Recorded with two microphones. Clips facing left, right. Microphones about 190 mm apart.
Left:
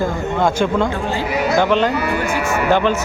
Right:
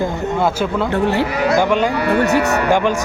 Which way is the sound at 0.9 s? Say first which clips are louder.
Right 5 dB; 70° right (ahead or behind).